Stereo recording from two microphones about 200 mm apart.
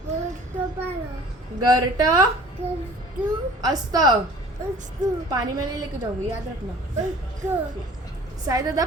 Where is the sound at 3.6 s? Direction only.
20° right (ahead or behind).